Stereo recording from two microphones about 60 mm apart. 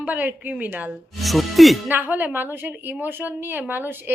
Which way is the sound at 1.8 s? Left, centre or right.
Right.